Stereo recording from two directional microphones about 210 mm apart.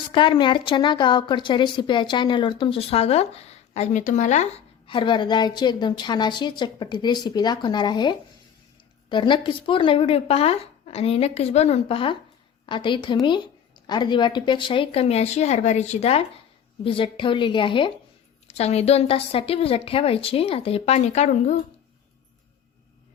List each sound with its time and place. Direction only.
0.1 s a woman's voice: 25° left (ahead or behind)